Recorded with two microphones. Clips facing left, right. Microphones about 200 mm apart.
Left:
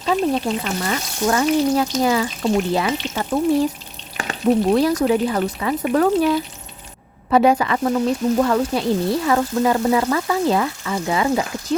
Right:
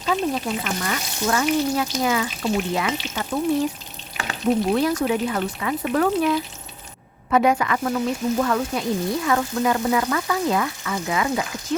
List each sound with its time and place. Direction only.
0.0 s frying: 30° left (ahead or behind)
4.3 s frying: 35° left (ahead or behind)